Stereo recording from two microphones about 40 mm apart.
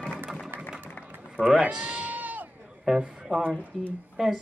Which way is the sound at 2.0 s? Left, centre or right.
Right.